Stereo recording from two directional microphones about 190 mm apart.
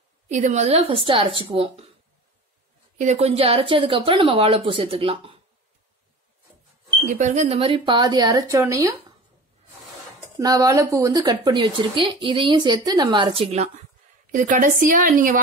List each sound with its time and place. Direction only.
0.3 s a woman's voice: 40° right (ahead or behind)
3.0 s speech: 35° right (ahead or behind)
7.1 s speech: 40° right (ahead or behind); by 8.9 s 15° right (ahead or behind)
10.3 s speech: 20° right (ahead or behind)
14.3 s a woman's voice: 40° right (ahead or behind)